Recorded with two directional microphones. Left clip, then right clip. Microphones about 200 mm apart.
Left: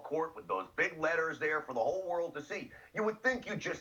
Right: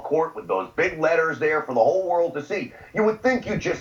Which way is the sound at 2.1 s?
40° right (ahead or behind).